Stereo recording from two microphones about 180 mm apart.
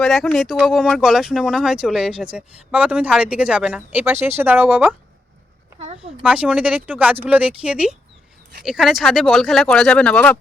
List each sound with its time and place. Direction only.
0.0 s speech: centre (ahead or behind)
5.8 s a sound: 35° right (ahead or behind)
6.2 s speech: 5° right (ahead or behind)